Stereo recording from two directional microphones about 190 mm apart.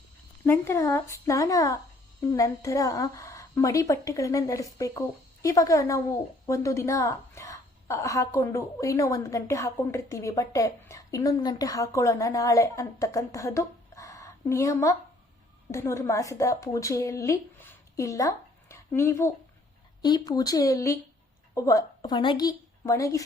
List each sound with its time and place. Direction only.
0.4 s a woman's voice: 15° left (ahead or behind)